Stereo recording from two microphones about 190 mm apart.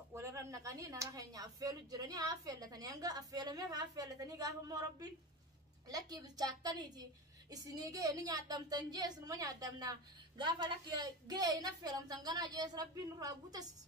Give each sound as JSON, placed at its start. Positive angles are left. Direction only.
{"t": 0.1, "sound": "a woman's voice", "side_deg": -15}